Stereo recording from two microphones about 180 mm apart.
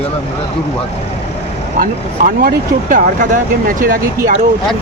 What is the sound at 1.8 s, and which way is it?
Speech, 50° right (ahead or behind).